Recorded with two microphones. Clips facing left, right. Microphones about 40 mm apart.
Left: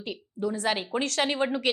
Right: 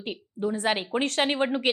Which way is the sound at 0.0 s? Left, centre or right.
Right.